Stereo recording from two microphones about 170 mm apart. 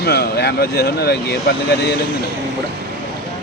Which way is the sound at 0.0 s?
70° left (ahead or behind).